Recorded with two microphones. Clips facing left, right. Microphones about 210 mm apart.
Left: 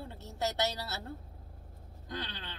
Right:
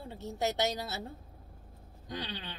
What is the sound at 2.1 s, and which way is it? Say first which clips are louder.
Speech: right 2 dB; 15° right (ahead or behind).